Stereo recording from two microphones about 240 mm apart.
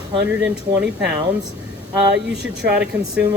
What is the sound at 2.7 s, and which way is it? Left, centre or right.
Speech, centre.